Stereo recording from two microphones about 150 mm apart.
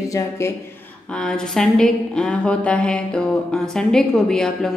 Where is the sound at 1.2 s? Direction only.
5° left (ahead or behind).